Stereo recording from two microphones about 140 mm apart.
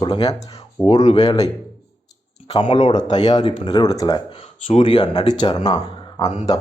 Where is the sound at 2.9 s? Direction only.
30° left (ahead or behind).